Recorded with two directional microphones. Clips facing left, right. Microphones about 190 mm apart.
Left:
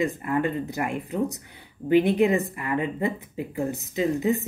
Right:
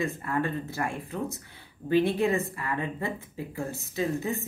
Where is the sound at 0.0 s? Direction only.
15° left (ahead or behind).